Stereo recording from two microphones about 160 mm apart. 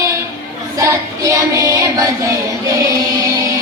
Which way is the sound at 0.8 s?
20° right (ahead or behind).